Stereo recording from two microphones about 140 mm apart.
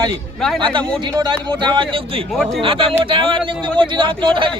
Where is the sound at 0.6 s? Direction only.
35° right (ahead or behind).